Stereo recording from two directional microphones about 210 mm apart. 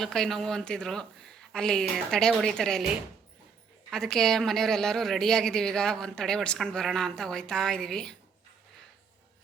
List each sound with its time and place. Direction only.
0.0 s speech: centre (ahead or behind)